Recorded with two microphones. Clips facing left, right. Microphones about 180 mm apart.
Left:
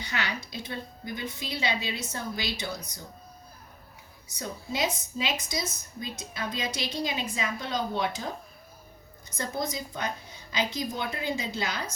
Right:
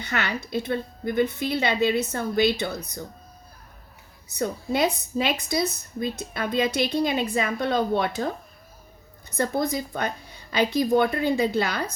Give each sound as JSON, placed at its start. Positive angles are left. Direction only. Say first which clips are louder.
{"t": 0.0, "sound": "a woman's voice", "louder": "right 5 dB", "side_deg": -55}
{"t": 4.4, "sound": "a woman's voice", "louder": "right 7 dB", "side_deg": -60}
{"t": 9.4, "sound": "a woman's voice", "louder": "right 7 dB", "side_deg": -60}